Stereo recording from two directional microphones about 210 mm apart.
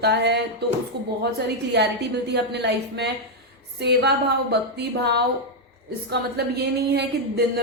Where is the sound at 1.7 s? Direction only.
55° right (ahead or behind).